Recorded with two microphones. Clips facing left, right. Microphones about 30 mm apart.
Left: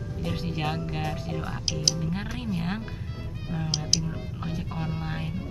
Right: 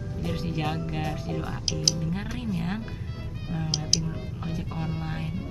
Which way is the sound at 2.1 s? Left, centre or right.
Centre.